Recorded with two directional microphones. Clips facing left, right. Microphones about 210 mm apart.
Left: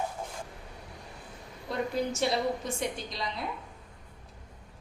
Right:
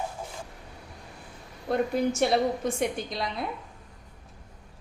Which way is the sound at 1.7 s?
55° right (ahead or behind).